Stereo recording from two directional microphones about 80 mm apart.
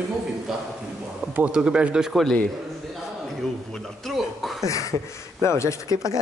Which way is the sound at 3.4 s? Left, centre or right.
Centre.